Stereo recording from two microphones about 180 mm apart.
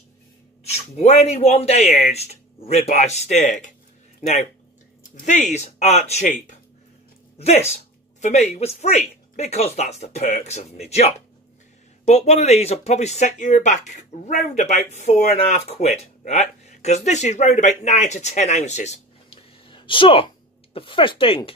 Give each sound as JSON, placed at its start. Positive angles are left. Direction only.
{"t": 0.9, "sound": "speech", "side_deg": 35}
{"t": 5.1, "sound": "speech", "side_deg": 45}